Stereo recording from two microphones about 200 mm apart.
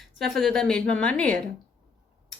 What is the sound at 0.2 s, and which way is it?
Speech, centre (ahead or behind).